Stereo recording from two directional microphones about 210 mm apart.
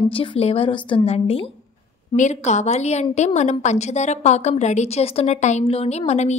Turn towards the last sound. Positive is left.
turn(degrees=30)  # may be behind; listen again after turning